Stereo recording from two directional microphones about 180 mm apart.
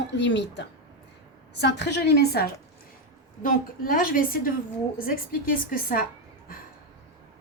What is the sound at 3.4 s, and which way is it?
A woman's voice, 50° left (ahead or behind).